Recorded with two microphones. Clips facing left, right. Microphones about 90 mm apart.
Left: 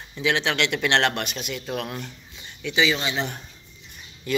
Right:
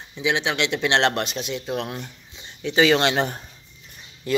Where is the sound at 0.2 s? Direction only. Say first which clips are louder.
Even; 15° right (ahead or behind).